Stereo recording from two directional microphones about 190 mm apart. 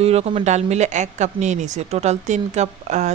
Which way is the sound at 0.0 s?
35° right (ahead or behind).